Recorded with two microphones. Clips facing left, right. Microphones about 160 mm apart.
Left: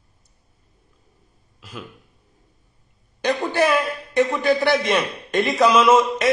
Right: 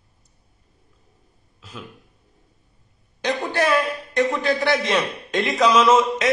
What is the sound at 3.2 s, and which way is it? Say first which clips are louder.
A man's voice: left 3 dB; centre (ahead or behind).